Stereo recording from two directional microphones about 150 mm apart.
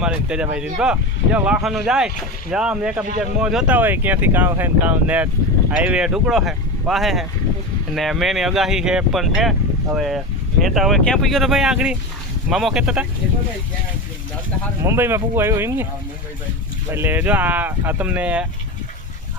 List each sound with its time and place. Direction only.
0.0 s speech: 5° right (ahead or behind)
14.8 s speech: 15° right (ahead or behind)
16.9 s speech: 15° right (ahead or behind)